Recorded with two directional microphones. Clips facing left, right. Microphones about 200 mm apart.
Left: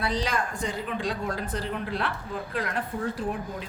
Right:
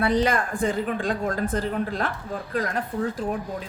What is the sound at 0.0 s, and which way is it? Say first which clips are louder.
Speech: right 6 dB; 55° right (ahead or behind).